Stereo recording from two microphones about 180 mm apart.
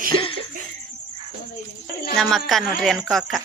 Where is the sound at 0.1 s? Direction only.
30° left (ahead or behind).